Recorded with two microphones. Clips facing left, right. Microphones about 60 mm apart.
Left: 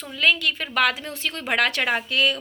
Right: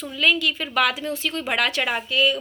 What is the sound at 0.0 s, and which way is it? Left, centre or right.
A woman's voice, left.